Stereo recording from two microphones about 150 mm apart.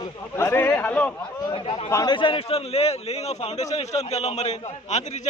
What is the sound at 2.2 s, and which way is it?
A man's voice, 35° left (ahead or behind).